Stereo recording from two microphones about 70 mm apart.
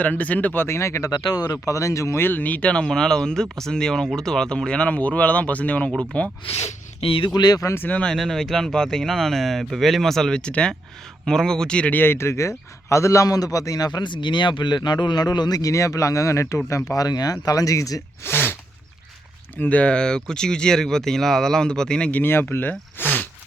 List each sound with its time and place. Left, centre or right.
0.0 s speech: left
1.1 s speech: left
2.2 s speech: left
7.3 s speech: left
7.8 s speech: left
8.1 s speech: centre; by 12.1 s left
12.1 s a man's voice: left
17.4 s a man's voice: left
18.2 s a sound: left
19.5 s speech: left
22.2 s speech: left
23.0 s a sound: left